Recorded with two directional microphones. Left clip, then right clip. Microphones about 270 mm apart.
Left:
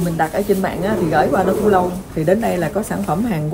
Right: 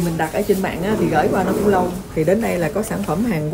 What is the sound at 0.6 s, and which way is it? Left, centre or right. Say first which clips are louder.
Speech: left 1 dB; centre.